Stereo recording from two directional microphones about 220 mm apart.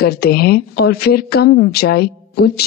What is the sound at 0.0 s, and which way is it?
A woman's voice, 45° left (ahead or behind).